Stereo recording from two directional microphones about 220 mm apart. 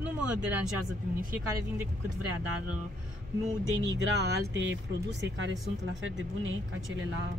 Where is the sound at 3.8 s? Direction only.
55° right (ahead or behind).